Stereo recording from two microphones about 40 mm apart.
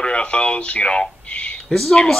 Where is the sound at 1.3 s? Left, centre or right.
Left.